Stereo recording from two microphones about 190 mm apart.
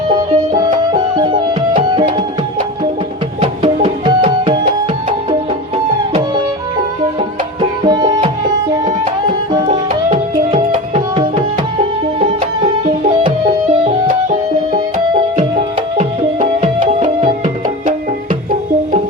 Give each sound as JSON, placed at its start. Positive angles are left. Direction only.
{"t": 0.5, "sound": "music", "side_deg": -25}
{"t": 3.4, "sound": "music", "side_deg": -30}
{"t": 7.9, "sound": "music", "side_deg": -20}
{"t": 9.6, "sound": "tabla", "side_deg": -30}
{"t": 12.8, "sound": "music", "side_deg": -25}
{"t": 13.8, "sound": "music", "side_deg": -40}
{"t": 16.0, "sound": "music", "side_deg": -35}